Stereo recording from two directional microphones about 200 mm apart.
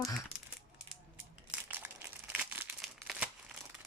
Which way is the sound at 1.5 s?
10° right (ahead or behind).